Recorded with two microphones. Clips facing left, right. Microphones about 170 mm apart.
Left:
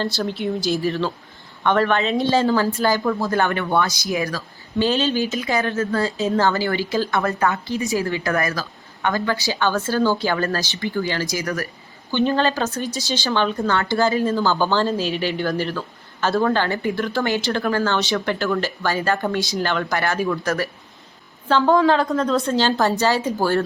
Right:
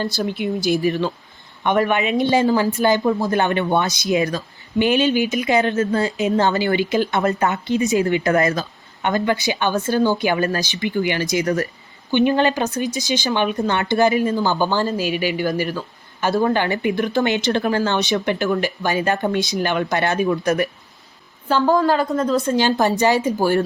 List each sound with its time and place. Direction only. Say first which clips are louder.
0.0 s speech: right 1 dB; 15° right (ahead or behind)
21.5 s speech: left 1 dB; 5° right (ahead or behind)